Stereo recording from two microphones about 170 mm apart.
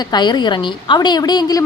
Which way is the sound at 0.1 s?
25° left (ahead or behind).